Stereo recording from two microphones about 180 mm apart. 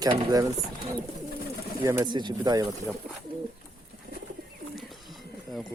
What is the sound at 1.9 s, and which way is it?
Speech, 20° right (ahead or behind).